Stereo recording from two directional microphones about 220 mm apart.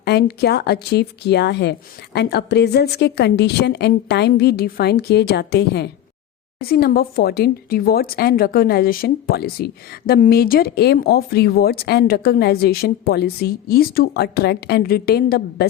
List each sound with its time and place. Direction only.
0.0 s speech: 45° left (ahead or behind)